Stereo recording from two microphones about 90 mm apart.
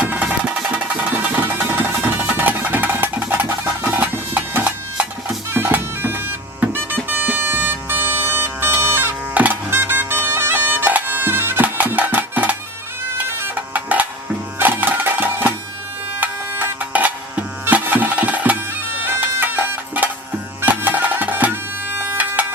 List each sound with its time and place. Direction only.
0.0 s music: 15° right (ahead or behind)
5.5 s bagpipes: 25° right (ahead or behind)
7.1 s music: 20° right (ahead or behind)
18.9 s bagpipes: 20° right (ahead or behind)
20.7 s music: 20° right (ahead or behind)